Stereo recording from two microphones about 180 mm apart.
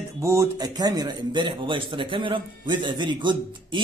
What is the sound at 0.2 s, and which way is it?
Speech, 15° right (ahead or behind).